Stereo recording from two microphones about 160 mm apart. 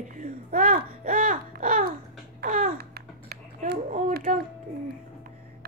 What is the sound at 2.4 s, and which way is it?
Babbling, 60° right (ahead or behind).